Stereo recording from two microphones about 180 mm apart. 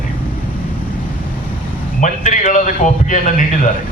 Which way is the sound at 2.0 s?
45° left (ahead or behind).